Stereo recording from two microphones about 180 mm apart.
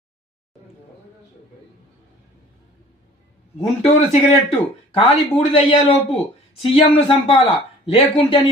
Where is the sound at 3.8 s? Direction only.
35° left (ahead or behind).